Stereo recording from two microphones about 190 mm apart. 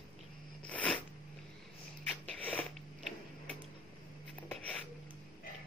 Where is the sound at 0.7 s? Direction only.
5° left (ahead or behind).